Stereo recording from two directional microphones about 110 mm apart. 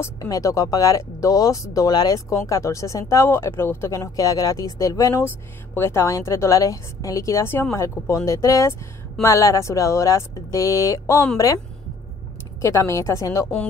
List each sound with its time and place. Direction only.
0.2 s speech: 30° left (ahead or behind)
12.6 s speech: 25° left (ahead or behind)